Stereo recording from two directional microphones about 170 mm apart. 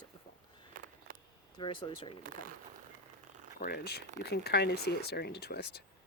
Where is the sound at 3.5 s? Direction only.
60° left (ahead or behind).